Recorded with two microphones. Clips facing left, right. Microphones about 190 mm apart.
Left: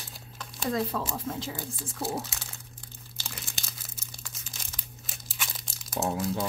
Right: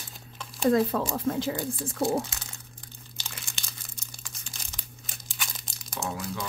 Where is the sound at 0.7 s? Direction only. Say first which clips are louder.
Right 6 dB; 55° right (ahead or behind).